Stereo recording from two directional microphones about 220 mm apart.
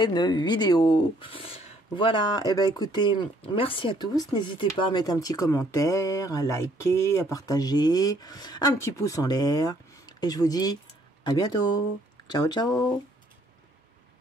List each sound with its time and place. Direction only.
0.0 s speech: 20° left (ahead or behind)